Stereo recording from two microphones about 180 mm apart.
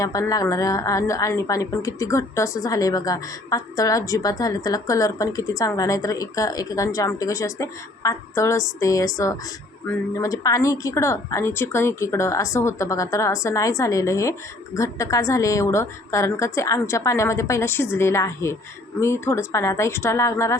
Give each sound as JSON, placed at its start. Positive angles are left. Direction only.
{"t": 0.0, "sound": "a woman's voice", "side_deg": 20}